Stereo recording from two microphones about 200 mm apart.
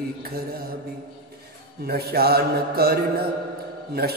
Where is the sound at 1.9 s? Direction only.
50° right (ahead or behind).